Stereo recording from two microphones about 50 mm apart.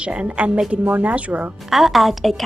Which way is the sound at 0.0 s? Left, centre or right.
Right.